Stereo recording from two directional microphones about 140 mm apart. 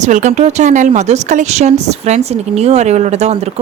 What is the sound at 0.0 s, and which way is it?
Speech, 60° right (ahead or behind).